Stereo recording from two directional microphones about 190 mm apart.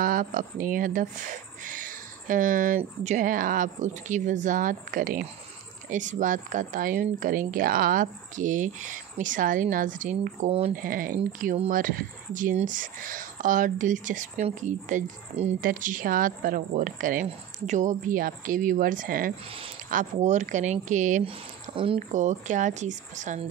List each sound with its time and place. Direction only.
0.0 s speech: 45° right (ahead or behind)
21.3 s speech: 30° right (ahead or behind)